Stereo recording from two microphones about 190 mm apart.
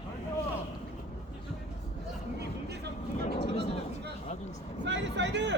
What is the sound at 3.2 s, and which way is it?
Speech, 25° left (ahead or behind).